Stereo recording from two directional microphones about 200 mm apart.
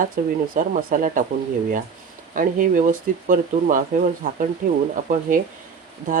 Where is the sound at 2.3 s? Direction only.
40° right (ahead or behind).